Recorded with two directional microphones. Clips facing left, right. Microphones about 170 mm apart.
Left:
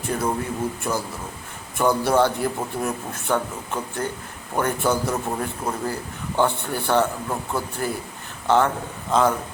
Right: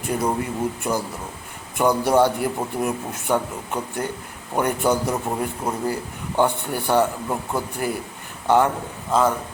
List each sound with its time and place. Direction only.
0.1 s a man's voice: 15° right (ahead or behind)